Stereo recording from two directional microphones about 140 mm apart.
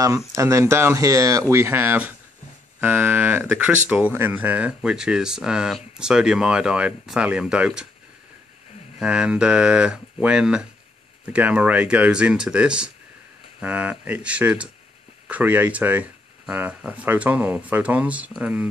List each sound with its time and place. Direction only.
0.4 s speech: 20° right (ahead or behind); by 7.9 s 5° right (ahead or behind)
9.0 s speech: 5° right (ahead or behind)